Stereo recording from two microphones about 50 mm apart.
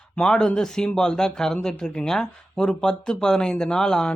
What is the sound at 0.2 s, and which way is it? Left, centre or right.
Speech, centre.